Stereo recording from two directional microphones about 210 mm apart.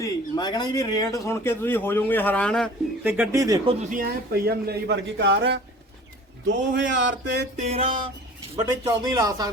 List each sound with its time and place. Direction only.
0.0 s a man's voice: 20° left (ahead or behind); by 2.6 s 5° left (ahead or behind)
3.0 s speech: 10° right (ahead or behind)
3.8 s a man's voice: 40° right (ahead or behind); by 5.5 s 60° right (ahead or behind)
6.5 s a sound: 60° right (ahead or behind)
7.5 s speech: 30° right (ahead or behind)